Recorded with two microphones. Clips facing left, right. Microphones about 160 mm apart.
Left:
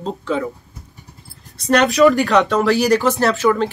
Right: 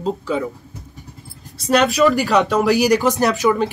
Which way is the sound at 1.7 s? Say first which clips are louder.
Left 2 dB; centre (ahead or behind).